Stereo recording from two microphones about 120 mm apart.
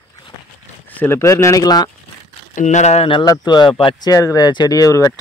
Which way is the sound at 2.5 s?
75° left (ahead or behind).